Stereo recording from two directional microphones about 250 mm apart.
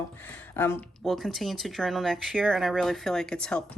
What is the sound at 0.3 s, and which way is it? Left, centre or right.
Speech, centre.